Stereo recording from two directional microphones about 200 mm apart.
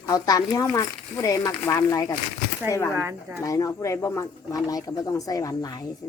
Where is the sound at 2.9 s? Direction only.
15° right (ahead or behind).